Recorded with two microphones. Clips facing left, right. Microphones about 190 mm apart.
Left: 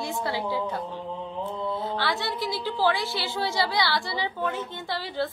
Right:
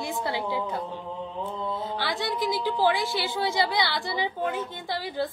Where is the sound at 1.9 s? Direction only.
15° right (ahead or behind).